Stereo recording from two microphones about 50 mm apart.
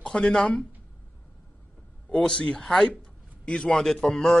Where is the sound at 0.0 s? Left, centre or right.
Centre.